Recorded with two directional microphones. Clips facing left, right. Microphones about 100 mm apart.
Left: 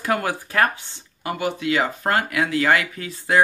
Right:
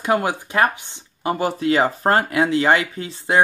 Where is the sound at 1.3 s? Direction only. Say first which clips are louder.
Right 3 dB; 35° right (ahead or behind).